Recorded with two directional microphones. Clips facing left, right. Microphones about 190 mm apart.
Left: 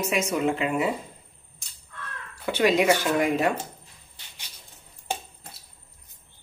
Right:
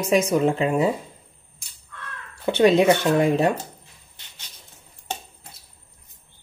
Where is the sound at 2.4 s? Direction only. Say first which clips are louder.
Right 5 dB; 30° right (ahead or behind).